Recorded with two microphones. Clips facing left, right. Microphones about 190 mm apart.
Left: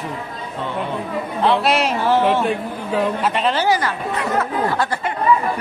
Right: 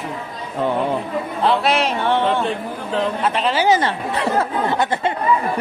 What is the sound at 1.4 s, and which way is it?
A man's voice, centre (ahead or behind).